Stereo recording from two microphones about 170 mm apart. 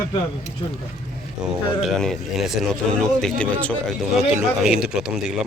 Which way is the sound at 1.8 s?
Centre (ahead or behind).